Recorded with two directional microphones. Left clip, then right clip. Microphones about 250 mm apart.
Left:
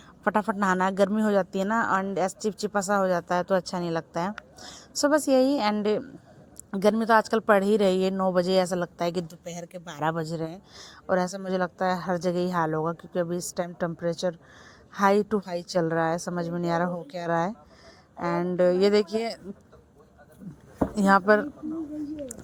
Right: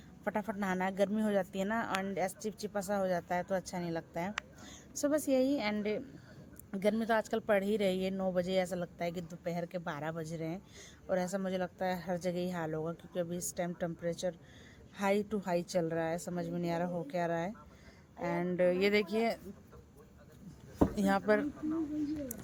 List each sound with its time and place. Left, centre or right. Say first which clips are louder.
0.3 s speech: left 12 dB; centre
9.6 s speech: even; centre
10.0 s speech: left 11 dB; left
20.9 s speech: left 13 dB; centre